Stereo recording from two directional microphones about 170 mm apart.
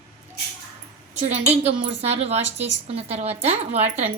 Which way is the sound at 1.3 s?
35° right (ahead or behind).